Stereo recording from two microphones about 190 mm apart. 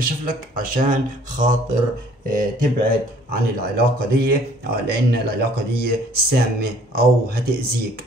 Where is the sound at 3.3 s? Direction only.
55° right (ahead or behind).